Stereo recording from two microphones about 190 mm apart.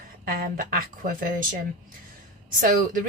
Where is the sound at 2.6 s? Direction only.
45° right (ahead or behind).